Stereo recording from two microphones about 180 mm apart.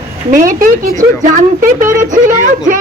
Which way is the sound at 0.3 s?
50° right (ahead or behind).